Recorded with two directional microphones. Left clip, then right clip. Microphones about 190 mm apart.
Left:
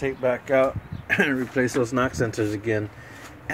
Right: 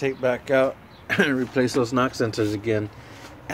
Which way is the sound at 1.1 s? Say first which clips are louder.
Even; 20° right (ahead or behind).